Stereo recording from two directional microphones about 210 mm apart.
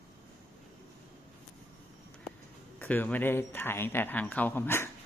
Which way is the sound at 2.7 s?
10° left (ahead or behind).